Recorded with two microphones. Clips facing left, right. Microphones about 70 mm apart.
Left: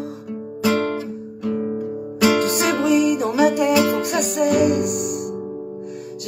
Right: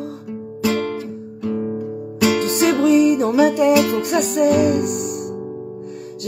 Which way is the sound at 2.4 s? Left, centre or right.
Left.